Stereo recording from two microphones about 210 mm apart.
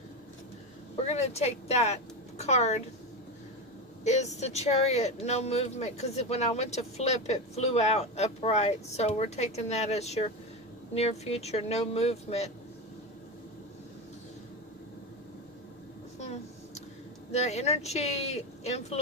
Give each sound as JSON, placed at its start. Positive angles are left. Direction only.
{"t": 0.9, "sound": "speech", "side_deg": 30}
{"t": 4.0, "sound": "speech", "side_deg": 35}
{"t": 17.3, "sound": "speech", "side_deg": 30}